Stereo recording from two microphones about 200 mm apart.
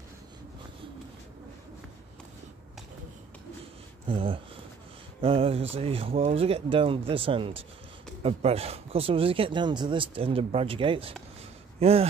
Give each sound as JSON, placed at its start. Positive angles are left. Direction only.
{"t": 4.1, "sound": "speech", "side_deg": -25}